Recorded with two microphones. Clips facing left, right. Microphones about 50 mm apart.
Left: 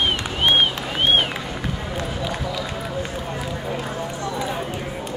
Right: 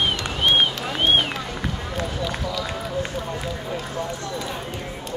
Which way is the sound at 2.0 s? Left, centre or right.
Centre.